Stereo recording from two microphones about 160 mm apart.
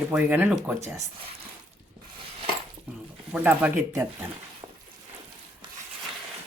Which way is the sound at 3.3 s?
10° right (ahead or behind).